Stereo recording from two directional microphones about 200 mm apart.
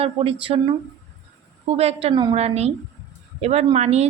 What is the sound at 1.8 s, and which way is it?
A woman's voice, 30° right (ahead or behind).